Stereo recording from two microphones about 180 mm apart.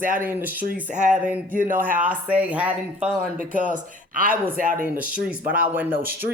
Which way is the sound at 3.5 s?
45° right (ahead or behind).